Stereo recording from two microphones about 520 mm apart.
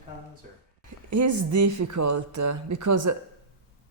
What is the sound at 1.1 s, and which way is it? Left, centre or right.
Speech, right.